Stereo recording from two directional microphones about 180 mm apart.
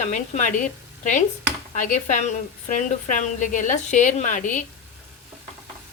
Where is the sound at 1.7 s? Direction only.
45° left (ahead or behind).